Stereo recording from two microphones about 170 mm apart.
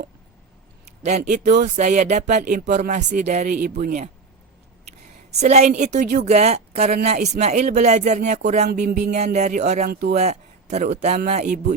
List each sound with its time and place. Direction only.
1.0 s speech: 45° right (ahead or behind)
5.4 s a woman's voice: 40° right (ahead or behind)
9.9 s speech: 60° right (ahead or behind)
10.2 s a man's voice: 40° right (ahead or behind)